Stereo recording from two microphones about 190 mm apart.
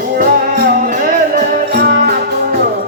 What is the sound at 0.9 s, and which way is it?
Music, 40° right (ahead or behind).